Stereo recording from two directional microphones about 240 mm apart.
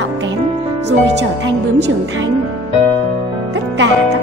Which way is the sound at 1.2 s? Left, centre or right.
Right.